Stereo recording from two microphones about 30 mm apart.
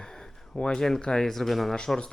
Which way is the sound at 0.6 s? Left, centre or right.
Left.